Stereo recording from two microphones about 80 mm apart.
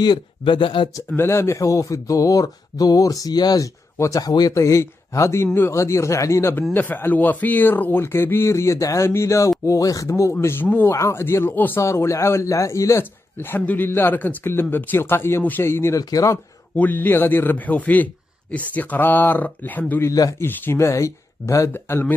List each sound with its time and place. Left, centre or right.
0.0 s speech: left
1.1 s speech: left
4.6 s a man's voice: left
6.7 s a man's voice: left
10.4 s a man's voice: left
11.8 s a man's voice: left
13.6 s a man's voice: centre
16.0 s speech: left
16.7 s a man's voice: left
20.1 s speech: left
20.3 s a man's voice: left
20.7 s a man's voice: left